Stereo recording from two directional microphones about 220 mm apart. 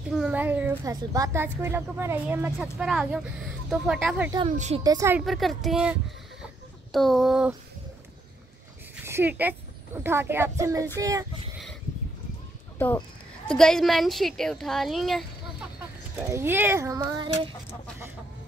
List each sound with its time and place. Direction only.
0.1 s a woman's voice: 5° right (ahead or behind)
4.5 s a woman's voice: 30° right (ahead or behind)
4.8 s a woman's voice: 15° right (ahead or behind)
5.2 s speech: centre (ahead or behind)
9.0 s a woman's voice: 10° right (ahead or behind)
13.5 s speech: 5° left (ahead or behind)
16.2 s a woman's voice: 10° right (ahead or behind)